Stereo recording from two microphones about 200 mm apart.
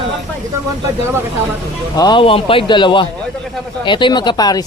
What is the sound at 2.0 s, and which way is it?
A man's voice, 25° left (ahead or behind).